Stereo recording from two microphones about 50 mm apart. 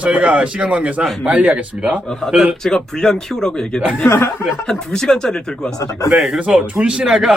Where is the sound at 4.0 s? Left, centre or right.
Left.